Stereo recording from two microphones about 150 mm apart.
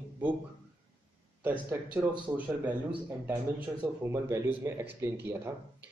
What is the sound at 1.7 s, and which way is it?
Speech, 10° right (ahead or behind).